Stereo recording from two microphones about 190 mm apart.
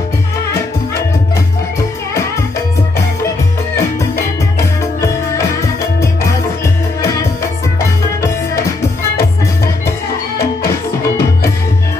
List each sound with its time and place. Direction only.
5.0 s music: 15° left (ahead or behind)
10.4 s music: 15° left (ahead or behind)